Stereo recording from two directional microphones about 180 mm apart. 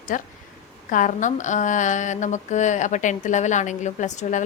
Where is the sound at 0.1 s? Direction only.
45° left (ahead or behind).